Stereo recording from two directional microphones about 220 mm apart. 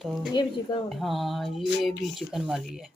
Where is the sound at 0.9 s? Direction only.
Centre (ahead or behind).